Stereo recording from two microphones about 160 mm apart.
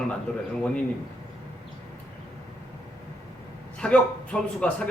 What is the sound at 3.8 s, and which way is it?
A man's voice, 5° left (ahead or behind).